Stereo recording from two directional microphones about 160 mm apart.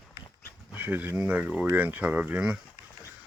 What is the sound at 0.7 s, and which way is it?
Speech, 10° right (ahead or behind).